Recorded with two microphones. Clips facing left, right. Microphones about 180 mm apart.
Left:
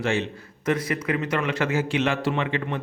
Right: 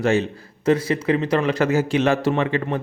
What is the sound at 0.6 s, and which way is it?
A man's voice, 30° right (ahead or behind).